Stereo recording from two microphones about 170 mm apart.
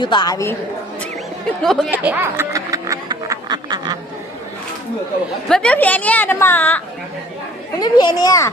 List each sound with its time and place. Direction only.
0.0 s a child's voice: 25° left (ahead or behind)
1.6 s speech: 5° left (ahead or behind)
1.9 s snicker: 10° right (ahead or behind)
5.5 s speech: 5° left (ahead or behind)
7.8 s a child's voice: 25° left (ahead or behind)